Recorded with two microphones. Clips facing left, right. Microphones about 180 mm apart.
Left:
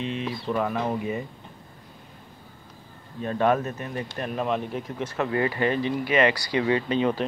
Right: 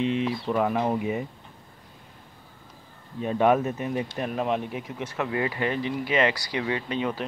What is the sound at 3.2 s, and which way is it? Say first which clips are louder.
Speech: right 1 dB; 15° right (ahead or behind).